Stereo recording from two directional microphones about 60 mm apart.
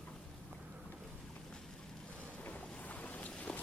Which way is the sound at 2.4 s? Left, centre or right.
Left.